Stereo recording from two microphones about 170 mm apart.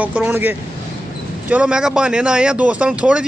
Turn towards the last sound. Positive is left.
turn(degrees=-5)  # may be behind; listen again after turning